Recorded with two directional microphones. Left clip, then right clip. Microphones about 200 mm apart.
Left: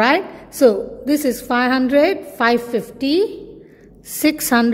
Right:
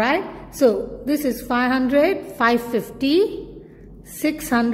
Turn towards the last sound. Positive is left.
turn(degrees=20)  # may be behind; listen again after turning